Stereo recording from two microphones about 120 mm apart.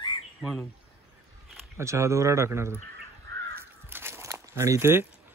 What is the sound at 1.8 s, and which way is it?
Speech, 25° right (ahead or behind).